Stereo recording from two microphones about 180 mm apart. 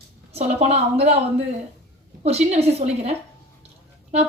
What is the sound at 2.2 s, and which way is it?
Speech, 35° right (ahead or behind).